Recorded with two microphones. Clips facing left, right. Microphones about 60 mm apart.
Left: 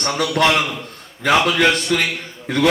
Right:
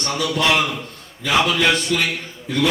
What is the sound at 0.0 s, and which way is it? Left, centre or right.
A man's voice, left.